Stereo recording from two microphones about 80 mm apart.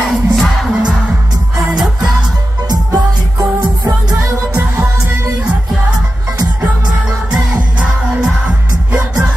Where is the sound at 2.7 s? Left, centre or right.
Right.